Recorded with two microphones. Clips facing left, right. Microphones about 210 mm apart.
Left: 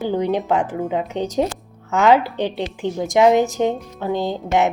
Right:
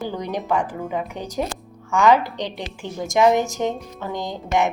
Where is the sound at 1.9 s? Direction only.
20° left (ahead or behind).